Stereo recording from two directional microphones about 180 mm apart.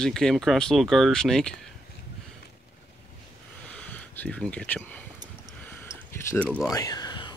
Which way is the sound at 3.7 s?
10° left (ahead or behind).